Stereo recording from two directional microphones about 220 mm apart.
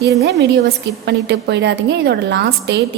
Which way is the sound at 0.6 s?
50° right (ahead or behind).